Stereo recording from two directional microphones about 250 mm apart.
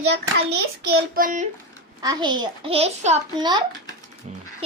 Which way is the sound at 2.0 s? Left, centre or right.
Centre.